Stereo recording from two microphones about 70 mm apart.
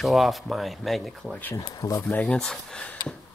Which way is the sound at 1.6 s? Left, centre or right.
Left.